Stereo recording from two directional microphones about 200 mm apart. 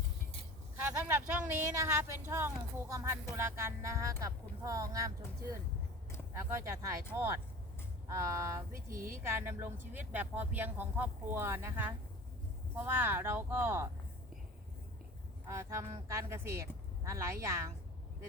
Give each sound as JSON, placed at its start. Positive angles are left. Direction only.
{"t": 1.5, "sound": "speech", "side_deg": -10}
{"t": 8.0, "sound": "speech", "side_deg": -15}
{"t": 8.7, "sound": "speech", "side_deg": -45}
{"t": 9.1, "sound": "speech", "side_deg": -10}
{"t": 15.4, "sound": "speech", "side_deg": -15}